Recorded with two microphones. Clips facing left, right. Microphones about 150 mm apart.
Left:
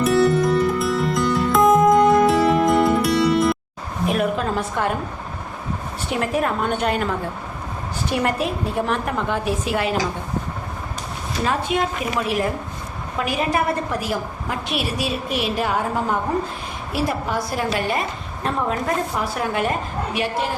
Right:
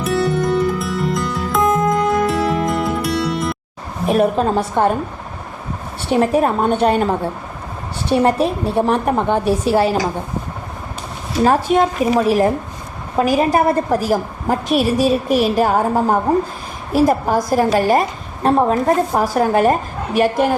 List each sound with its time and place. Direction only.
0.0 s music: centre (ahead or behind)
4.1 s a woman's voice: 35° right (ahead or behind)
6.1 s a woman's voice: 30° right (ahead or behind)
11.4 s a woman's voice: 45° right (ahead or behind)